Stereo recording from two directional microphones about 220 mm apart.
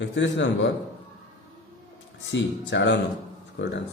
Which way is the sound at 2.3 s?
55° left (ahead or behind).